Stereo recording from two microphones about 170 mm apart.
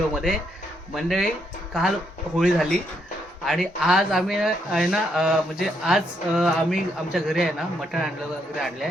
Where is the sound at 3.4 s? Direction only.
Centre (ahead or behind).